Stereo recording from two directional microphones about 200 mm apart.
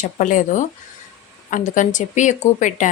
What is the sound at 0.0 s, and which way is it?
Speech, 40° left (ahead or behind).